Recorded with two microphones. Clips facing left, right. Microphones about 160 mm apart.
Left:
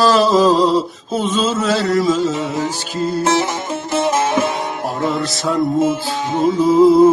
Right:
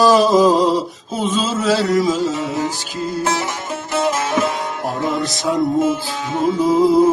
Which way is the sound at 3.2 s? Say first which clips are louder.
Left 4 dB; 25° left (ahead or behind).